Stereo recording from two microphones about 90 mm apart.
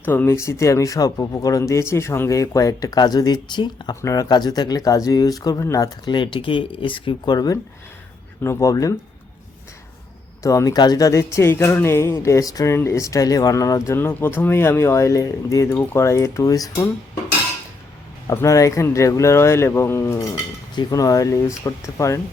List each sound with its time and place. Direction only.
0.0 s speech: 20° left (ahead or behind); by 3.9 s 55° left (ahead or behind)
4.0 s speech: 45° left (ahead or behind)
5.5 s speech: 35° left (ahead or behind)
6.1 s speech: 65° left (ahead or behind)
7.3 s speech: 45° left (ahead or behind)
8.4 s speech: 35° left (ahead or behind)
10.4 s speech: 40° left (ahead or behind)
12.7 s speech: 30° left (ahead or behind)
15.7 s speech: 30° left (ahead or behind)
18.3 s speech: 35° left (ahead or behind)